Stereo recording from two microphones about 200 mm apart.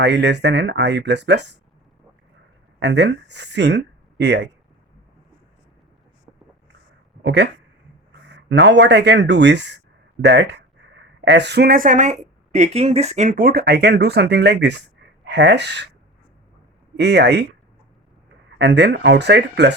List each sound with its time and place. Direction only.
0.0 s speech: 60° right (ahead or behind)
2.8 s speech: 60° right (ahead or behind)
7.2 s speech: 60° right (ahead or behind)
17.0 s speech: 55° right (ahead or behind)
18.6 s speech: 60° right (ahead or behind)